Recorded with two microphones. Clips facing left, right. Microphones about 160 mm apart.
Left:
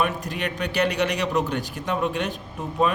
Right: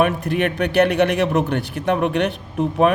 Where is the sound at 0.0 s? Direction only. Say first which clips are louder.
Right 7 dB; 55° right (ahead or behind).